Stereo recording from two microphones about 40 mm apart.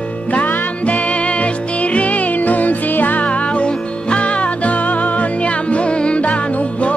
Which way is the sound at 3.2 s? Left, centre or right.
Left.